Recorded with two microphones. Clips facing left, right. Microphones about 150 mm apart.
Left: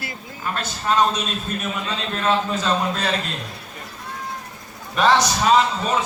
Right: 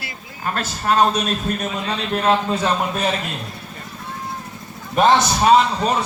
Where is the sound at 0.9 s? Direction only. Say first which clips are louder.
Right 2 dB; 50° right (ahead or behind).